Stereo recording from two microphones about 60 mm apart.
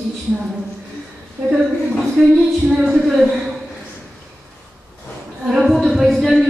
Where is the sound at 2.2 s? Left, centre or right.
Centre.